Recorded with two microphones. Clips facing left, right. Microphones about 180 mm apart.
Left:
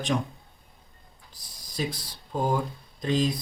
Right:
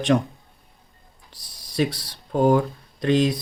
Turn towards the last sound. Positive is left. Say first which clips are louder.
# right 6 dB
turn(degrees=-75)  # may be behind; listen again after turning